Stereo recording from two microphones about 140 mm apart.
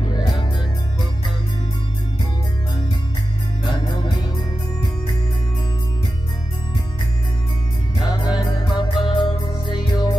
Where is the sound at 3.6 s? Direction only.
30° left (ahead or behind).